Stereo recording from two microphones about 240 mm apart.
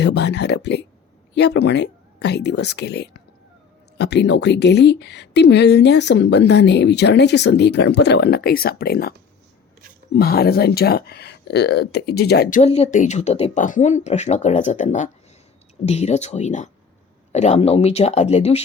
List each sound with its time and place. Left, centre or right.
0.0 s speech: left
10.2 s speech: left